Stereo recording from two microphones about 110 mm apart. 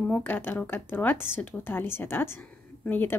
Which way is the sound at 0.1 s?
15° left (ahead or behind).